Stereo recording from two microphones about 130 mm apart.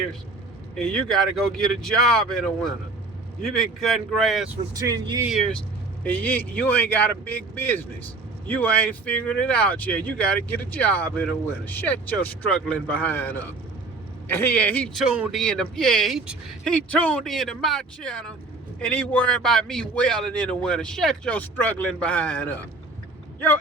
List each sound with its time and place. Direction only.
0.8 s speech: 5° left (ahead or behind)
4.7 s speech: 30° right (ahead or behind)
5.3 s speech: centre (ahead or behind)
6.0 s speech: 15° left (ahead or behind)
14.9 s speech: 5° right (ahead or behind); by 22.5 s 10° left (ahead or behind)